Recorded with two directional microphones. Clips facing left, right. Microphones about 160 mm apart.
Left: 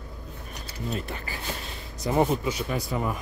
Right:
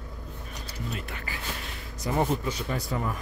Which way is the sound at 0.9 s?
35° left (ahead or behind).